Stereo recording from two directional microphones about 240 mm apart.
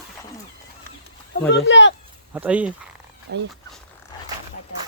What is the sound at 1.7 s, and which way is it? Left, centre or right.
Speech, left.